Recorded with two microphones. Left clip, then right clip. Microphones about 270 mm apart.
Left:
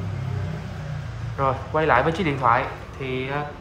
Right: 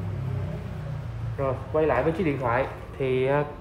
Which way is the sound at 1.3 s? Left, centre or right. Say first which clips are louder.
Left 3 dB; left.